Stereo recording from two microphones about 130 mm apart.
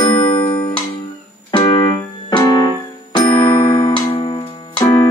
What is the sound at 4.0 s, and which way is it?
Music, 35° left (ahead or behind).